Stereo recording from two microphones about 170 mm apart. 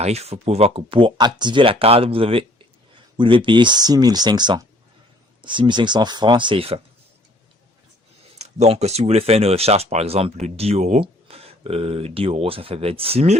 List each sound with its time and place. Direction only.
0.0 s speech: 40° right (ahead or behind)
8.4 s speech: 40° right (ahead or behind)